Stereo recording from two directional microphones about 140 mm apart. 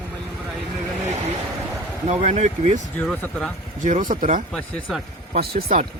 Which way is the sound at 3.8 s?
65° right (ahead or behind).